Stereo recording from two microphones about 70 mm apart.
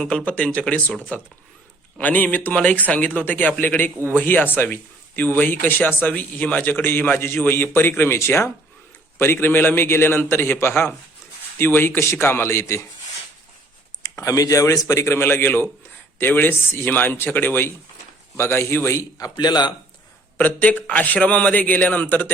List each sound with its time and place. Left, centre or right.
0.0 s speech: centre
2.0 s a man's voice: left
14.0 s a man's voice: left
19.2 s a man's voice: left
20.4 s speech: left